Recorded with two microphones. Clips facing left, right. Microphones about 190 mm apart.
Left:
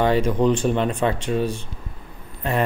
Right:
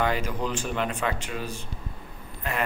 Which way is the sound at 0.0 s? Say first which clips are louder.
Left 9 dB; 30° left (ahead or behind).